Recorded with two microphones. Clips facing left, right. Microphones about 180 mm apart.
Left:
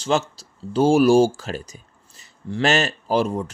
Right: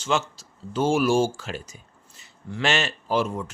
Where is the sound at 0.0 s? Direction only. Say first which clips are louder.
Left 4 dB; 35° left (ahead or behind).